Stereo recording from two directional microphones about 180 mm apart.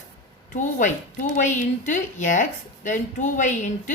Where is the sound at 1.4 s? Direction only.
45° left (ahead or behind).